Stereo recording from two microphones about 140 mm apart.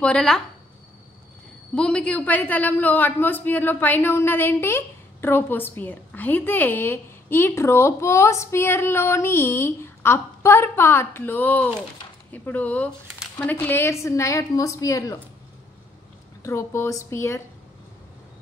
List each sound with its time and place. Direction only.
0.0 s speech: 5° left (ahead or behind)
1.8 s a man's voice: 10° left (ahead or behind); by 15.1 s 25° left (ahead or behind)
16.4 s a woman's voice: 20° left (ahead or behind)